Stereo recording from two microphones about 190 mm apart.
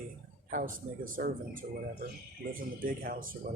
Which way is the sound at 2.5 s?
50° right (ahead or behind).